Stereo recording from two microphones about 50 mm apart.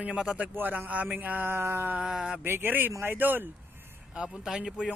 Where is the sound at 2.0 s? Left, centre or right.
Centre.